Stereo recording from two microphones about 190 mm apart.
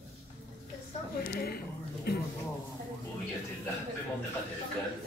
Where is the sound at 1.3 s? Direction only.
55° left (ahead or behind).